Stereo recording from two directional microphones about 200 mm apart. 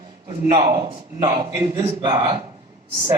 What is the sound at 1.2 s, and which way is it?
A man's voice, 20° right (ahead or behind).